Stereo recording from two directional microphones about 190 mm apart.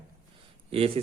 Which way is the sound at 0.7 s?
30° right (ahead or behind).